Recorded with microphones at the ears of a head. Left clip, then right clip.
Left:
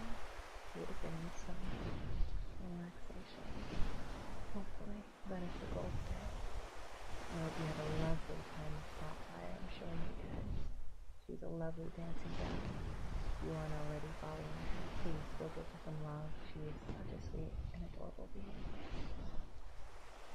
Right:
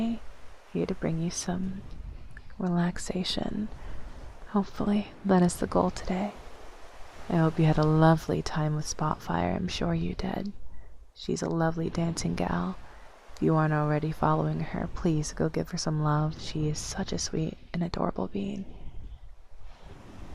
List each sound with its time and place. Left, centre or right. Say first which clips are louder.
0.7 s speech: right 18 dB; right